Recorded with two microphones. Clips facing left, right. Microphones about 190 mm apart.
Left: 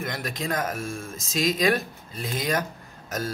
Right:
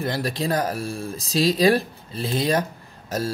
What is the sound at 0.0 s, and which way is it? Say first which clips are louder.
Speech: right 6 dB; 35° right (ahead or behind).